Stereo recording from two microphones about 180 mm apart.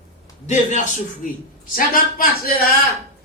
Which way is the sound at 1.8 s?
50° left (ahead or behind).